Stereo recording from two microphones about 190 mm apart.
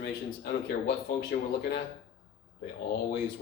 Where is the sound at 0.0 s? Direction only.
55° left (ahead or behind).